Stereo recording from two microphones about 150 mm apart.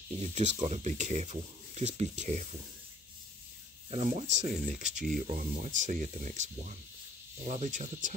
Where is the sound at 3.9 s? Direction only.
50° right (ahead or behind).